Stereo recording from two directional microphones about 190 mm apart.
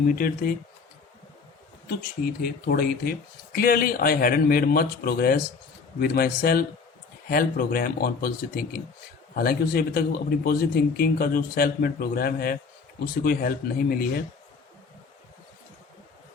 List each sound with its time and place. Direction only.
0.2 s speech: 50° left (ahead or behind)
1.9 s speech: 55° left (ahead or behind)